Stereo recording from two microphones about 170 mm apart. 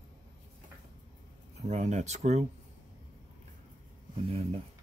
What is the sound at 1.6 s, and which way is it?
Speech, 40° right (ahead or behind).